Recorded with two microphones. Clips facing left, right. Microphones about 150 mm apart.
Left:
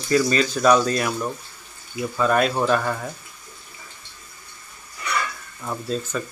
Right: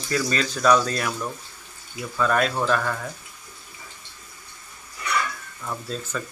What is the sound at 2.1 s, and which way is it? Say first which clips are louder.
Speech: left 2 dB; 15° left (ahead or behind).